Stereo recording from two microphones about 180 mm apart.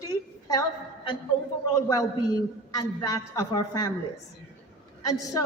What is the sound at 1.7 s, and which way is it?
A man's voice, 20° left (ahead or behind).